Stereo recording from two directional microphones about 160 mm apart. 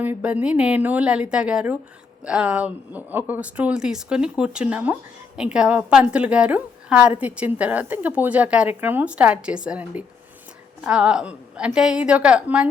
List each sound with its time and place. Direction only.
0.0 s a woman's voice: 10° right (ahead or behind)